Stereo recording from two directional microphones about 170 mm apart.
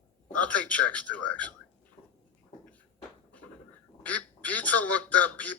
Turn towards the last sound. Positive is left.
turn(degrees=10)  # may be behind; listen again after turning